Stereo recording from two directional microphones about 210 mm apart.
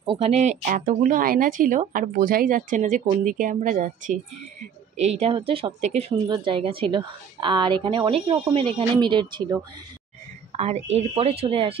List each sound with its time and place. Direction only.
0.0 s a woman's voice: 30° right (ahead or behind)
10.5 s a sound: 30° right (ahead or behind)
11.0 s a woman's voice: 30° right (ahead or behind)